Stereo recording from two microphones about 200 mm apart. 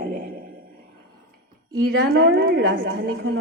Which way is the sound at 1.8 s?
50° right (ahead or behind).